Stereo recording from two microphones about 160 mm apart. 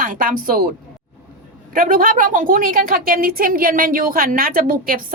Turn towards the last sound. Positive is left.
turn(degrees=-60)  # may be behind; listen again after turning